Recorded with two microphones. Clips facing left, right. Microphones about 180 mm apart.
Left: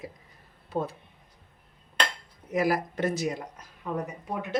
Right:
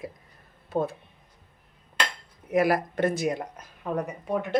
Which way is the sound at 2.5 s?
60° right (ahead or behind).